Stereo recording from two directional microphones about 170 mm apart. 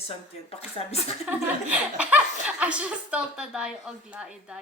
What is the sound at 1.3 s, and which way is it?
A woman's voice, 10° right (ahead or behind).